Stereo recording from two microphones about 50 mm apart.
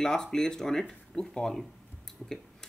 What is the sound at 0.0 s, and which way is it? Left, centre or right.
Speech, centre.